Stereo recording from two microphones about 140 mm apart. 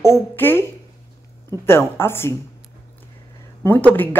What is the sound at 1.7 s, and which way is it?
Speech, 15° left (ahead or behind).